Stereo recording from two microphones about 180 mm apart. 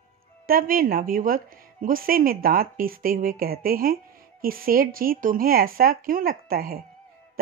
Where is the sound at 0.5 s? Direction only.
50° right (ahead or behind).